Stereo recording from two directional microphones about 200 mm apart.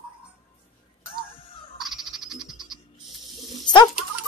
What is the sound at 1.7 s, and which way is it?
Frog, centre (ahead or behind).